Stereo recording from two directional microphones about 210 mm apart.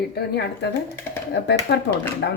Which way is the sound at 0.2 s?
50° left (ahead or behind).